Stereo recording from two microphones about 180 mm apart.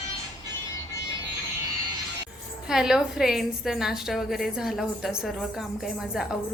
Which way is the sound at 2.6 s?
5° right (ahead or behind).